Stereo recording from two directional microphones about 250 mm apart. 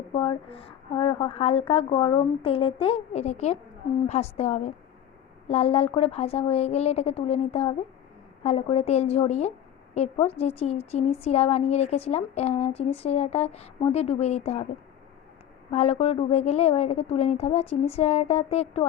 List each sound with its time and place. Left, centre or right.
0.1 s a woman's voice: left
15.7 s a woman's voice: left